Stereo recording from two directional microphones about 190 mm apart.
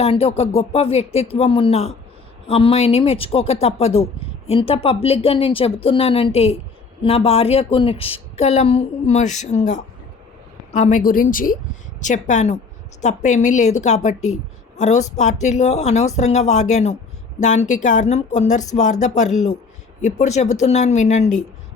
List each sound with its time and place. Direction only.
0.0 s a woman's voice: 30° left (ahead or behind)